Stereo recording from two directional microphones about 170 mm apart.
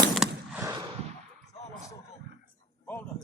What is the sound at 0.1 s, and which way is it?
Machine gun, centre (ahead or behind).